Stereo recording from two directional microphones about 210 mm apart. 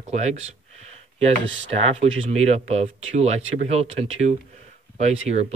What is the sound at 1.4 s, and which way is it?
Speech, 60° right (ahead or behind).